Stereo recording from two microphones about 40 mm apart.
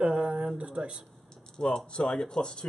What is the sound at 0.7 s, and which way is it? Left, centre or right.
Speech, centre.